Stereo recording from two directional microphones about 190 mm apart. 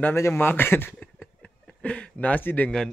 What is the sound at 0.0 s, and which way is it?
Speech, 10° left (ahead or behind).